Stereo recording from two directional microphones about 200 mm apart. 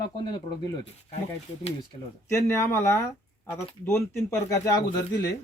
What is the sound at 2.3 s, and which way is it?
Speech, 15° left (ahead or behind).